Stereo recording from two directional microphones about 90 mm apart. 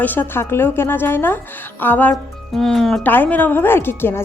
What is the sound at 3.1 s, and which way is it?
A woman's voice, 20° left (ahead or behind).